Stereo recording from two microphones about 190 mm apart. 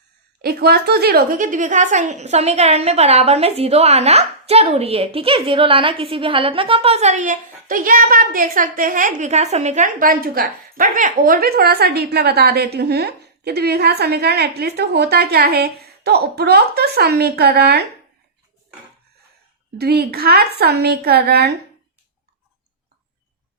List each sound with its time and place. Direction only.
0.4 s a woman's voice: 55° right (ahead or behind)
19.8 s a woman's voice: 55° right (ahead or behind)